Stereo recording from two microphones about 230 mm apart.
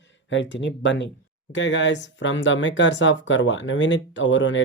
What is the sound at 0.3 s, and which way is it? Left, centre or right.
Speech, left.